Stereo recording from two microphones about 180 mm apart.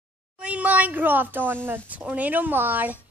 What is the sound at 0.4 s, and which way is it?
Speech, 5° right (ahead or behind).